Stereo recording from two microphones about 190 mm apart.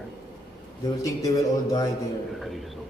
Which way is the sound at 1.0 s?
15° left (ahead or behind).